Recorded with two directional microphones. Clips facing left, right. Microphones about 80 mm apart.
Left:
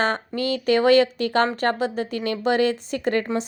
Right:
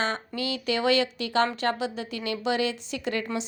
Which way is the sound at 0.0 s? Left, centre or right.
Left.